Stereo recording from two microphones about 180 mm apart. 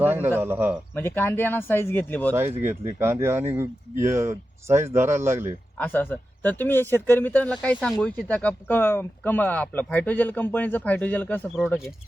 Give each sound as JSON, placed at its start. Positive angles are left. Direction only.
{"t": 0.0, "sound": "a man's voice", "side_deg": -10}
{"t": 0.9, "sound": "speech", "side_deg": 10}
{"t": 2.3, "sound": "speech", "side_deg": -10}
{"t": 5.7, "sound": "speech", "side_deg": 10}
{"t": 11.5, "sound": "speech", "side_deg": 0}